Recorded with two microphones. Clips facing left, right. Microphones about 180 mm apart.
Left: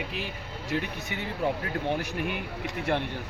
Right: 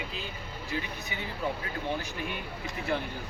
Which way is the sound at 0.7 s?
75° left (ahead or behind).